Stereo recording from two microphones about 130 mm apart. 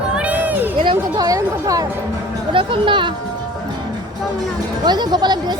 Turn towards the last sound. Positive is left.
turn(degrees=-30)  # may be behind; listen again after turning